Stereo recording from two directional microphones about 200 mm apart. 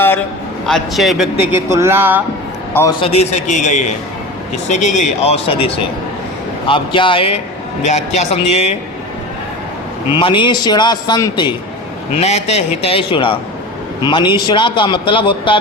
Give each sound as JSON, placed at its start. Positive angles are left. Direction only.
{"t": 0.6, "sound": "speech", "side_deg": 0}
{"t": 3.0, "sound": "a man's voice", "side_deg": 30}
{"t": 10.1, "sound": "a man's voice", "side_deg": 25}
{"t": 12.1, "sound": "a man's voice", "side_deg": 30}